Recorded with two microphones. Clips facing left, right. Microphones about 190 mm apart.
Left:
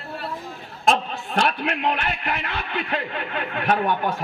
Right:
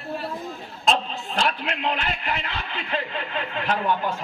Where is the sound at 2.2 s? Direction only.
60° left (ahead or behind).